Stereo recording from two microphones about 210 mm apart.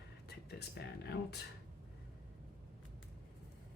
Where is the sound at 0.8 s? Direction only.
50° left (ahead or behind).